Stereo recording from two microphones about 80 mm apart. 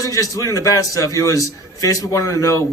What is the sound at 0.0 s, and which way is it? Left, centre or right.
A man's voice, left.